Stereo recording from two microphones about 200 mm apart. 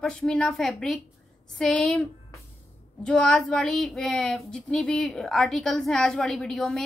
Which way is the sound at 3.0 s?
5° left (ahead or behind).